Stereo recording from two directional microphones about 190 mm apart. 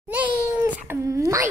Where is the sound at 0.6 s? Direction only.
15° right (ahead or behind).